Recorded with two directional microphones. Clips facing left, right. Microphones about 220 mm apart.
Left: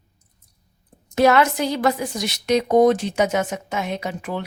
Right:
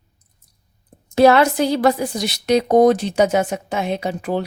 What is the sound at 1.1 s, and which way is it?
A woman's voice, 30° right (ahead or behind).